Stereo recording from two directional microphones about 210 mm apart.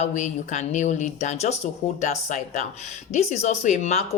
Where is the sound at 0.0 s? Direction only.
35° left (ahead or behind).